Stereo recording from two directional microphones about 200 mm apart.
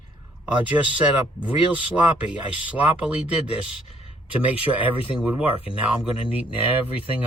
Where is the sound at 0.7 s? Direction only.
5° right (ahead or behind).